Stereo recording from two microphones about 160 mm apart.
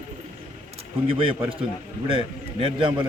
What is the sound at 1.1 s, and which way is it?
Speech, 35° right (ahead or behind).